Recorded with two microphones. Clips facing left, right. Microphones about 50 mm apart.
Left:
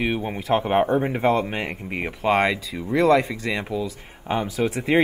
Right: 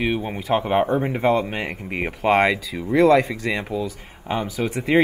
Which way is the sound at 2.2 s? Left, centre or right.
Centre.